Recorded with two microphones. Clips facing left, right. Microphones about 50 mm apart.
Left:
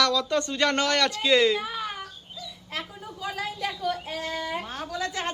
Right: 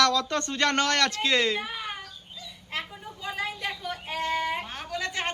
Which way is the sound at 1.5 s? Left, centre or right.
Right.